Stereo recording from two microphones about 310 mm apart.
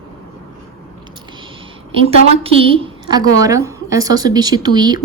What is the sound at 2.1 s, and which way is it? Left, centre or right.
A woman's voice, centre.